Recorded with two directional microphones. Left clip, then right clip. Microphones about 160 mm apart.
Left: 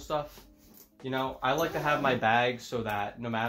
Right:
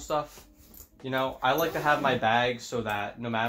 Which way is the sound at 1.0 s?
15° left (ahead or behind).